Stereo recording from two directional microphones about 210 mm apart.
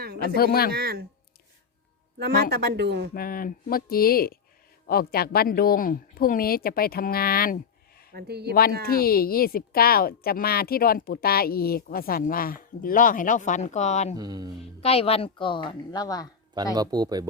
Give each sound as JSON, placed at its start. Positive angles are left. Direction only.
{"t": 0.0, "sound": "a sound", "side_deg": -45}
{"t": 0.3, "sound": "a woman's voice", "side_deg": 45}
{"t": 0.7, "sound": "speech", "side_deg": -45}
{"t": 2.1, "sound": "speech", "side_deg": -50}
{"t": 3.2, "sound": "a woman's voice", "side_deg": 40}
{"t": 8.1, "sound": "speech", "side_deg": -50}
{"t": 8.9, "sound": "a woman's voice", "side_deg": 45}
{"t": 14.2, "sound": "speech", "side_deg": -20}
{"t": 14.6, "sound": "speech", "side_deg": 30}
{"t": 16.7, "sound": "speech", "side_deg": -20}